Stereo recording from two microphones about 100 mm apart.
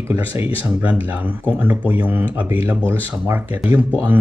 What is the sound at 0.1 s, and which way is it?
Speech, 20° right (ahead or behind).